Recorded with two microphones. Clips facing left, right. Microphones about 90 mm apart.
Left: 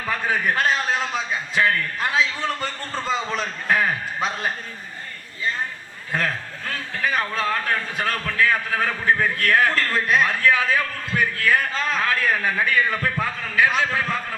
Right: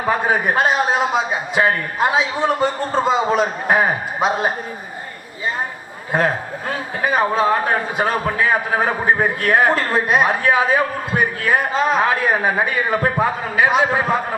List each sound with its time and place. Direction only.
0.0 s a man's voice: 20° right (ahead or behind)
6.1 s a man's voice: 20° right (ahead or behind)